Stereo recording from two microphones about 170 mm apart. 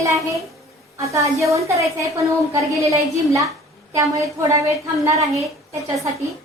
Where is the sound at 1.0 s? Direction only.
20° right (ahead or behind).